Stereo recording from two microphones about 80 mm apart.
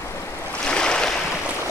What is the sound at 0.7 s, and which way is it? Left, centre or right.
Waves, centre.